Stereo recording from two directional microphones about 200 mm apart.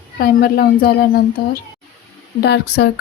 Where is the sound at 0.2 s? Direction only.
50° left (ahead or behind).